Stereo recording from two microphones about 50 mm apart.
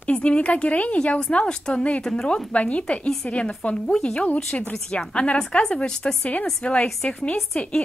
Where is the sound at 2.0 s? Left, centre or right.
Centre.